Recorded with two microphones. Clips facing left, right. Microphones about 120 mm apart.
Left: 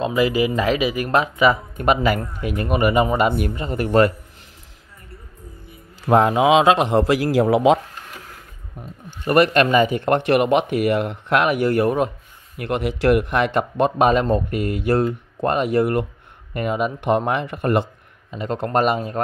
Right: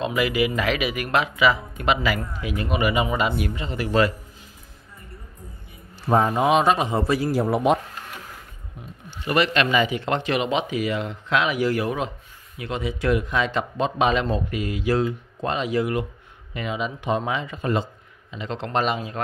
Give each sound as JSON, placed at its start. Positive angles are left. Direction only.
{"t": 0.0, "sound": "speech", "side_deg": 35}
{"t": 6.0, "sound": "a man's voice", "side_deg": 75}
{"t": 9.2, "sound": "a man's voice", "side_deg": 50}
{"t": 18.3, "sound": "speech", "side_deg": 45}